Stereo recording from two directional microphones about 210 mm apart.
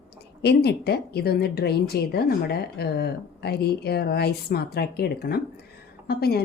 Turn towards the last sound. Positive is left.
turn(degrees=50)  # may be behind; listen again after turning